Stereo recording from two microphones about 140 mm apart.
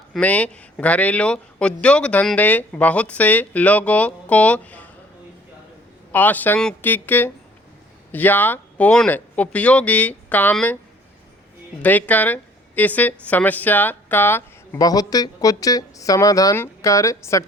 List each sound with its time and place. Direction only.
0.1 s speech: 10° left (ahead or behind)
6.1 s speech: 10° left (ahead or behind)
11.8 s a woman's voice: 10° left (ahead or behind)
14.8 s a woman's voice: 25° left (ahead or behind)